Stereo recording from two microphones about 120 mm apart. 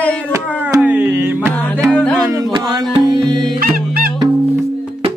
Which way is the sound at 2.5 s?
40° right (ahead or behind).